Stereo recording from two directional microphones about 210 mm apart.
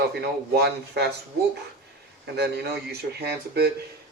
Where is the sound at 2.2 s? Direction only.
55° right (ahead or behind).